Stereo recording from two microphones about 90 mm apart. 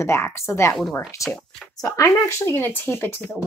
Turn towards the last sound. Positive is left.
turn(degrees=25)  # may be behind; listen again after turning